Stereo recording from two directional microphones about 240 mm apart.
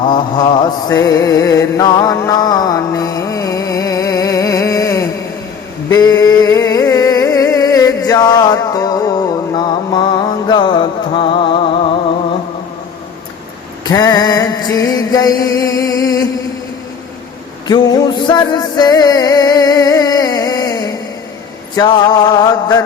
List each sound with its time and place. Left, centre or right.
0.0 s mantra: centre
5.9 s a sound: centre
13.8 s mantra: centre
18.3 s music: centre